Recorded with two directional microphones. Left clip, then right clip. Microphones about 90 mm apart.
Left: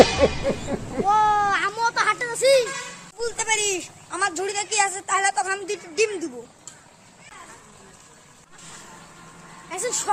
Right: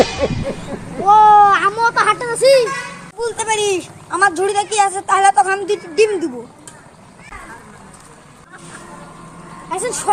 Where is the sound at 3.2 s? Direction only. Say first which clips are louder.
Right 7 dB; 25° left (ahead or behind).